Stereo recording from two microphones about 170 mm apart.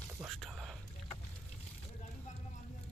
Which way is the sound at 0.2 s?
Centre (ahead or behind).